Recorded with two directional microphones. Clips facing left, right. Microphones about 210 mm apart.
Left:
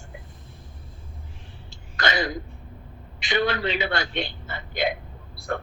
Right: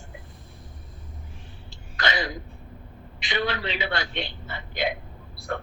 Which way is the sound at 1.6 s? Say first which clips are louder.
Left 2 dB; 45° left (ahead or behind).